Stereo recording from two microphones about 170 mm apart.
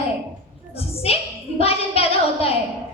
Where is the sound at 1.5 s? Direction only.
35° left (ahead or behind).